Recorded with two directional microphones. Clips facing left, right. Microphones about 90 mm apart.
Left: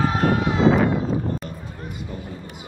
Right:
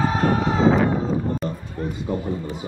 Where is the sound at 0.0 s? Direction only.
30° right (ahead or behind).